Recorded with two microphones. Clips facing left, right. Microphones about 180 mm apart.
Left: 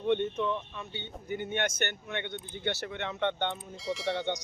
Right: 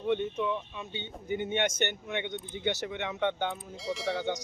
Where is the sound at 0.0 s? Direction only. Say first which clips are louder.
Left 1 dB; 5° right (ahead or behind).